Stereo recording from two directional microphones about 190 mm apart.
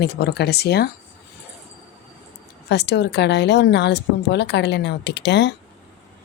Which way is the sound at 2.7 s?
60° left (ahead or behind).